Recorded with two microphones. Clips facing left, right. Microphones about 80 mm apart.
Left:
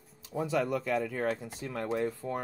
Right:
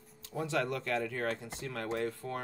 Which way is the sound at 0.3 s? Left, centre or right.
Centre.